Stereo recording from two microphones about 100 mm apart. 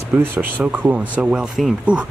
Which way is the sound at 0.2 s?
20° right (ahead or behind).